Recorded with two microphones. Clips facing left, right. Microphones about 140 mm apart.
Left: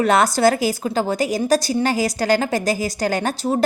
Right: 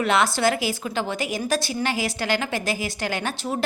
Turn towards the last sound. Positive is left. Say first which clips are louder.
# left 6 dB
turn(degrees=40)  # may be behind; listen again after turning